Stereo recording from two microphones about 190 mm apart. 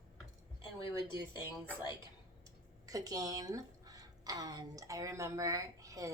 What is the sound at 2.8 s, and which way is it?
A woman's voice, 20° right (ahead or behind).